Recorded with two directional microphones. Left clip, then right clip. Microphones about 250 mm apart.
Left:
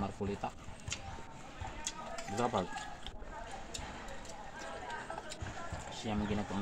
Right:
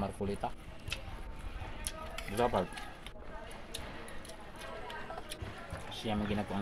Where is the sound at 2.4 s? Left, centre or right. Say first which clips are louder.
Right 3 dB; right.